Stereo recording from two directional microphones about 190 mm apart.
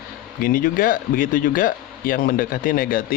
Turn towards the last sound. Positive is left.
turn(degrees=50)  # may be behind; listen again after turning